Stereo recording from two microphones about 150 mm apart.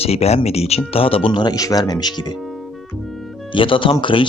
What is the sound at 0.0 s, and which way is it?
Speech, 45° left (ahead or behind).